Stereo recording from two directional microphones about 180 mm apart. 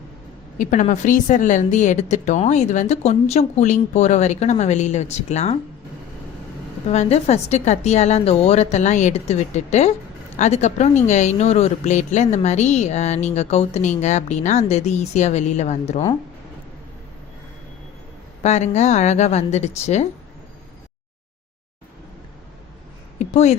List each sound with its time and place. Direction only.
0.6 s speech: 45° left (ahead or behind)
6.8 s speech: 35° left (ahead or behind)
18.4 s speech: 40° left (ahead or behind)
23.1 s speech: 40° left (ahead or behind)